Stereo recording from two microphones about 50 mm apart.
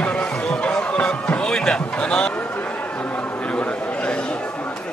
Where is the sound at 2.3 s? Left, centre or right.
Left.